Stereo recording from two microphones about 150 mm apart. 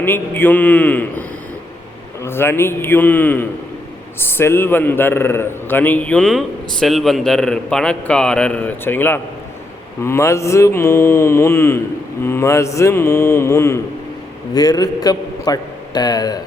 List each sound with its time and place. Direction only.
0.0 s a man's voice: 15° left (ahead or behind)
2.2 s a man's voice: 15° left (ahead or behind)